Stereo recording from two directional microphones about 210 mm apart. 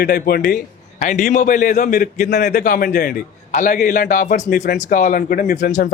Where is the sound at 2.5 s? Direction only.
50° left (ahead or behind).